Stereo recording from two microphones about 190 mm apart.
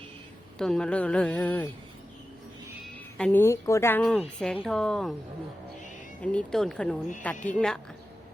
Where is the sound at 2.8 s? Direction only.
5° left (ahead or behind).